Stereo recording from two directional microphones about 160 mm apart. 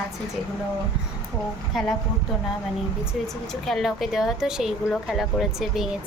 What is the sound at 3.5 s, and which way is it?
Speech, centre (ahead or behind).